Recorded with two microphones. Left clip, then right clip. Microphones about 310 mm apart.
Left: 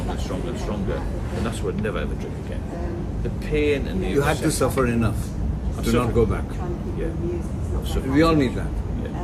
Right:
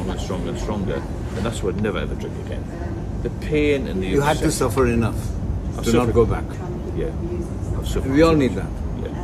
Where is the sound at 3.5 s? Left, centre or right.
Right.